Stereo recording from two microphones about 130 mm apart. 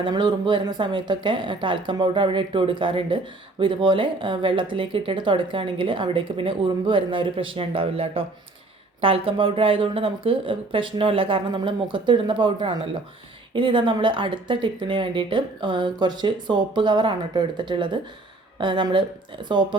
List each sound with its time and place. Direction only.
0.0 s speech: 35° right (ahead or behind)